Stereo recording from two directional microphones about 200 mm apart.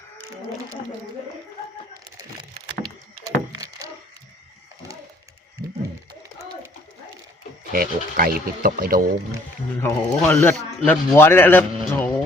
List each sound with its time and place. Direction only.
7.7 s speech: 45° right (ahead or behind)
9.8 s a man's voice: 5° left (ahead or behind)